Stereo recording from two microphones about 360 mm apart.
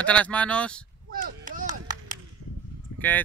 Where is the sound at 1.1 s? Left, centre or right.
Right.